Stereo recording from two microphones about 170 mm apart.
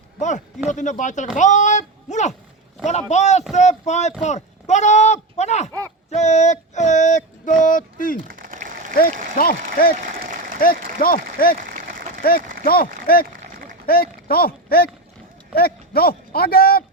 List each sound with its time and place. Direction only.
0.2 s speech: 45° left (ahead or behind)
6.1 s female singing: 40° left (ahead or behind)
7.6 s speech: 50° left (ahead or behind)
8.3 s applause: 55° right (ahead or behind)
9.4 s speech: 60° left (ahead or behind)
10.0 s applause: 50° right (ahead or behind)
10.6 s speech: 60° left (ahead or behind)